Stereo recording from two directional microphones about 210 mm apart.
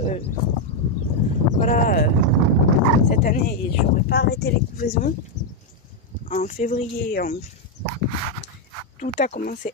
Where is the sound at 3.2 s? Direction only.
40° left (ahead or behind).